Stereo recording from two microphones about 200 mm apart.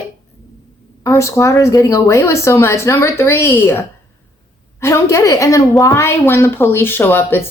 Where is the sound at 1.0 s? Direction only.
15° left (ahead or behind).